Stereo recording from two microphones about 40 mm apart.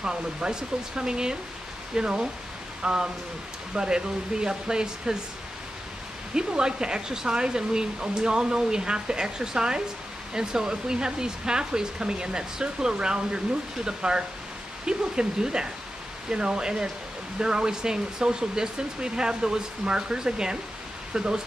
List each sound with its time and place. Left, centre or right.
0.0 s speech: centre
6.3 s speech: centre